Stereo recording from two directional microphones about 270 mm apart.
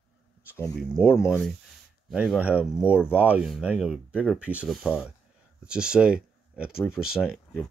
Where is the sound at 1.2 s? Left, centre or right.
Centre.